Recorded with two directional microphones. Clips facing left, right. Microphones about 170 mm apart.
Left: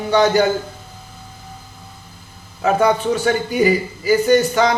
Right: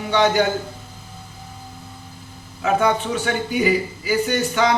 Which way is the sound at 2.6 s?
40° left (ahead or behind).